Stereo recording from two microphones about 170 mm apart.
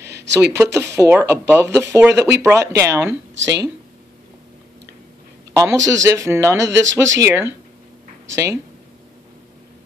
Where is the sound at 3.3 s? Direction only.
90° right.